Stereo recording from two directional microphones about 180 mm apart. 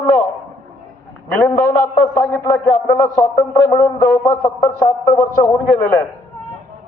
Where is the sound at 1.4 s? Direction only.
10° left (ahead or behind).